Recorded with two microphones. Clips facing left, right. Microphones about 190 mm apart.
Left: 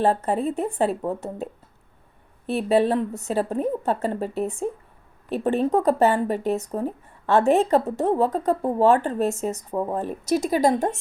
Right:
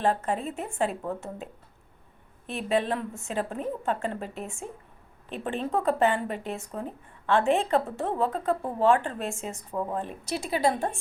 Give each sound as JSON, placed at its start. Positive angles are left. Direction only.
{"t": 0.0, "sound": "speech", "side_deg": 35}
{"t": 2.5, "sound": "speech", "side_deg": 35}